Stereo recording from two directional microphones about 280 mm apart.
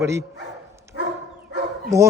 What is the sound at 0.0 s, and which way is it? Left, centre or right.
Speech, centre.